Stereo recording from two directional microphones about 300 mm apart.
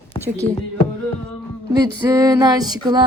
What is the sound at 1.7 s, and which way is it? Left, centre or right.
A woman's voice, centre.